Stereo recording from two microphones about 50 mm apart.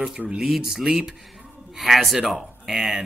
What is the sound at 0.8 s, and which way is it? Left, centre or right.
Speech, centre.